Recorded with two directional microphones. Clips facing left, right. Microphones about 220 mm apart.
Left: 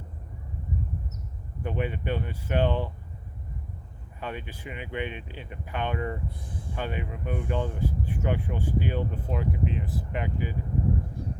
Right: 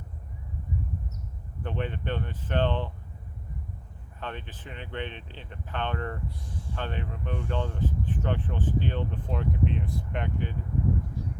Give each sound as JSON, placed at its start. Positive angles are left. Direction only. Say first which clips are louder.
{"t": 1.6, "sound": "speech", "louder": "left 2 dB", "side_deg": 10}
{"t": 4.2, "sound": "speech", "louder": "left 2 dB", "side_deg": 10}
{"t": 6.2, "sound": "speech", "louder": "left 1 dB", "side_deg": 55}
{"t": 6.7, "sound": "speech", "louder": "left 2 dB", "side_deg": 10}
{"t": 11.2, "sound": "crow", "louder": "even", "side_deg": 55}